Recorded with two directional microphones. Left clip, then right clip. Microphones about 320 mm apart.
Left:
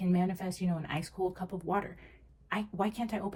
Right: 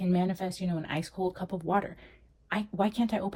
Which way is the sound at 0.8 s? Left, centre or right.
Right.